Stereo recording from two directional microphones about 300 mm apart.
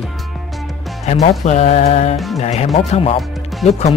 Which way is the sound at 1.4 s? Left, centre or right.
Left.